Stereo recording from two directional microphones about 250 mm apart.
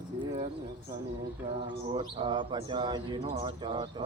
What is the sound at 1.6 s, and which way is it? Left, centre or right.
A man's voice, centre.